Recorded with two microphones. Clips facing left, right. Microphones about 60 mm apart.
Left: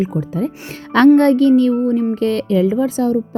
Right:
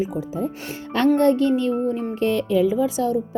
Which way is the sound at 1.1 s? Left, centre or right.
Left.